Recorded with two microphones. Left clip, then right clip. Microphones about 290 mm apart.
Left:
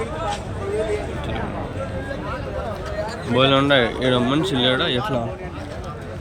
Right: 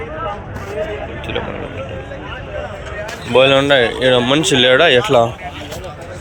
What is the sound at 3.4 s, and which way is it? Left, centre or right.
Speech, centre.